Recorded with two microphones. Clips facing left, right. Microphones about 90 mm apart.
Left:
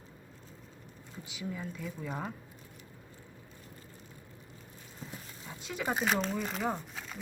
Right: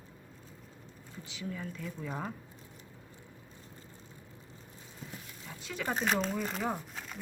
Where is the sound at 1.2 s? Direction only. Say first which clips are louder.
Left 1 dB; 15° left (ahead or behind).